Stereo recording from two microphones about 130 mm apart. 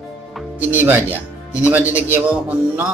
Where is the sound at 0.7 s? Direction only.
15° right (ahead or behind).